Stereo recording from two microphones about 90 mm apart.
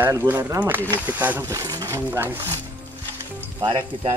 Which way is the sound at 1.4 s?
40° right (ahead or behind).